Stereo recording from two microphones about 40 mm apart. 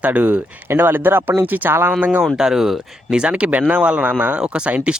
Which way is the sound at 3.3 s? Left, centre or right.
Right.